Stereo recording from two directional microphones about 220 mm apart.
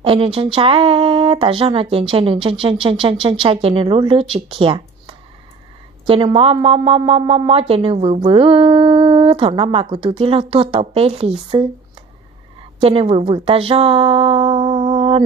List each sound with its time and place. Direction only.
0.0 s speech: 25° right (ahead or behind)
12.8 s a woman's voice: 25° right (ahead or behind)